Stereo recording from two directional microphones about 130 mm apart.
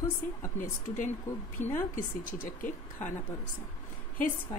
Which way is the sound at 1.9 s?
90° left.